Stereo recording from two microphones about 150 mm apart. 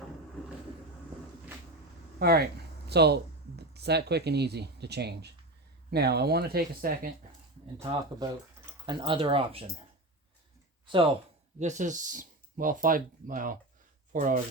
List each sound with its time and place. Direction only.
2.1 s speech: 90° right
7.8 s speech: 20° right (ahead or behind)
8.9 s speech: 35° right (ahead or behind)
11.6 s speech: 55° right (ahead or behind)